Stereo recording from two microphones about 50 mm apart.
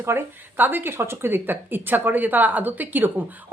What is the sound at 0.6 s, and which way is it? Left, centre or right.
Speech, right.